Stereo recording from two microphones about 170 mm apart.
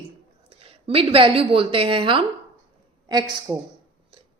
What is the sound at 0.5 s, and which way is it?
A woman's voice, 35° right (ahead or behind).